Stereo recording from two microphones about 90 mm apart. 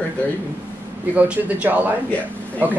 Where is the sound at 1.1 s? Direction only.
15° right (ahead or behind).